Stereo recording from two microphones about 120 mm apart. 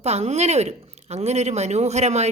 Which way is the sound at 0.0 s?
60° right (ahead or behind).